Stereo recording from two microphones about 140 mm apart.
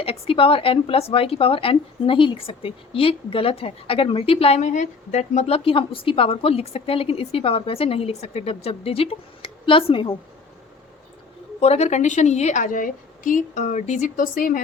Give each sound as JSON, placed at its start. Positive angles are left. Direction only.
{"t": 0.0, "sound": "speech", "side_deg": 40}
{"t": 11.6, "sound": "a woman's voice", "side_deg": 50}